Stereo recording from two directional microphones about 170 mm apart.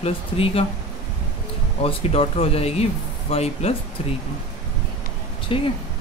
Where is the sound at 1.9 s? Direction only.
35° left (ahead or behind).